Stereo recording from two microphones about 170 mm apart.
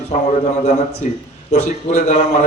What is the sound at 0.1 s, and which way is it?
A man's voice, 40° left (ahead or behind).